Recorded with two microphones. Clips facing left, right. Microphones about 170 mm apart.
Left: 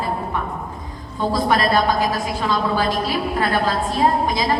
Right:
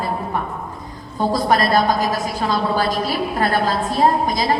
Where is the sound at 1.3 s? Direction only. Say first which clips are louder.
Right 1 dB; 40° right (ahead or behind).